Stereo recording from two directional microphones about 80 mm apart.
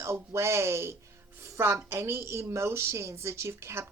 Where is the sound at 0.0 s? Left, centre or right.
Right.